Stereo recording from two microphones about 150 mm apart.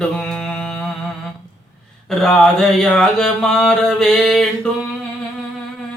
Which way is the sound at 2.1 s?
Centre (ahead or behind).